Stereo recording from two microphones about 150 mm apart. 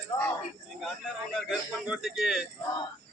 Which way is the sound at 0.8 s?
5° left (ahead or behind).